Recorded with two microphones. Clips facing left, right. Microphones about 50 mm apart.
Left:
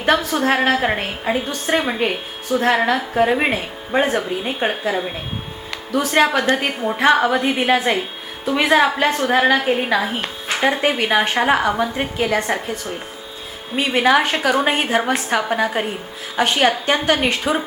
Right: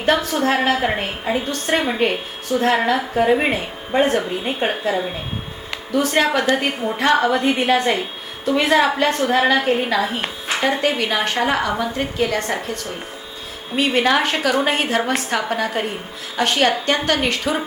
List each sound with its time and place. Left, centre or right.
0.0 s a woman's voice: centre
13.7 s a woman's voice: centre